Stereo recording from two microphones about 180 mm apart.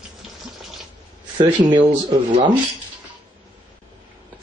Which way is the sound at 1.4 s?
25° right (ahead or behind).